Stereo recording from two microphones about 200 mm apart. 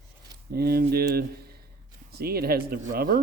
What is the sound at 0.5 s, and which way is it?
Speech, 50° right (ahead or behind).